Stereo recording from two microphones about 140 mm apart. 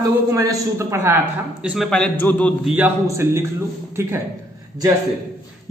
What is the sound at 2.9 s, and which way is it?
A man's voice, 20° right (ahead or behind).